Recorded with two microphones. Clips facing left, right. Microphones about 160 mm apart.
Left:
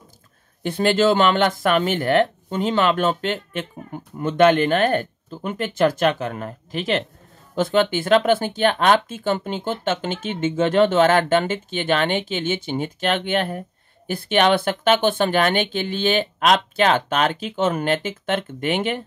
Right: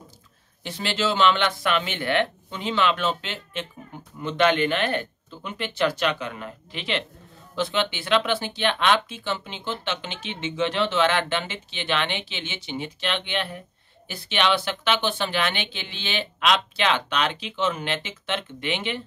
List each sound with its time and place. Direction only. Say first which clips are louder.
0.7 s speech: left 9 dB; 50° left (ahead or behind)